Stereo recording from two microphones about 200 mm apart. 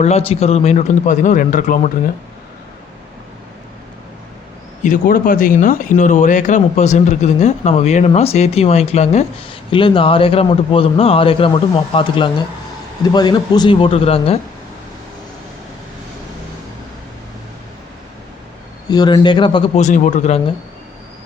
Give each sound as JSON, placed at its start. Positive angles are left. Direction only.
{"t": 0.0, "sound": "speech", "side_deg": 30}
{"t": 4.8, "sound": "a man's voice", "side_deg": 45}
{"t": 18.9, "sound": "a man's voice", "side_deg": 20}